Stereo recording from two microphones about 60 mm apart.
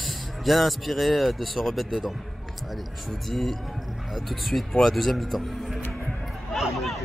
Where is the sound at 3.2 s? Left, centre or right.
Centre.